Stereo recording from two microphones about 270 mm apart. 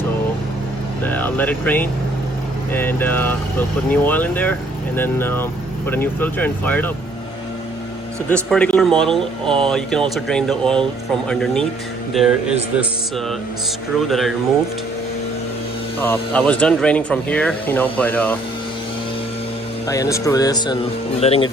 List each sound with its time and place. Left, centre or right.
1.0 s speech: centre
8.3 s speech: centre
16.0 s speech: centre
19.9 s speech: centre